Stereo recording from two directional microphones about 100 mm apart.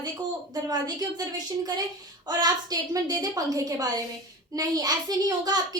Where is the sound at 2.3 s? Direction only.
40° right (ahead or behind).